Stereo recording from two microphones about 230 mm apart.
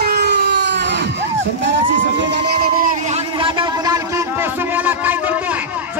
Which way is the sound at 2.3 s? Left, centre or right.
Right.